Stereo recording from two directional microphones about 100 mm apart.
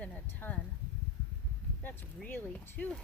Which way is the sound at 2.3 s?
20° left (ahead or behind).